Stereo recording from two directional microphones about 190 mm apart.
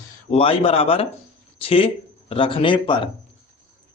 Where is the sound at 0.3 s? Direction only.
30° left (ahead or behind).